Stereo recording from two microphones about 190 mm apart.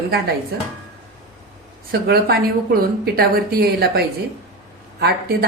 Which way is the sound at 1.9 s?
55° right (ahead or behind).